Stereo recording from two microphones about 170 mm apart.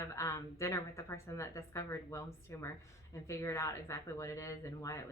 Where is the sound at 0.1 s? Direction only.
20° left (ahead or behind).